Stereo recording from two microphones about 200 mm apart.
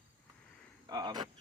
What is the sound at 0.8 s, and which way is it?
Speech, 20° right (ahead or behind).